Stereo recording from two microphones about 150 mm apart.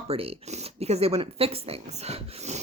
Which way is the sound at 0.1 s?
40° right (ahead or behind).